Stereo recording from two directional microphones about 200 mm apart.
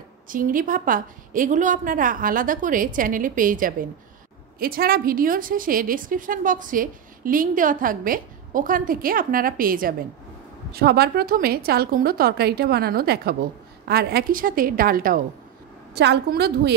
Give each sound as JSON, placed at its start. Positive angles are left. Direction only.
{"t": 0.3, "sound": "a woman's voice", "side_deg": -45}
{"t": 15.9, "sound": "a woman's voice", "side_deg": -55}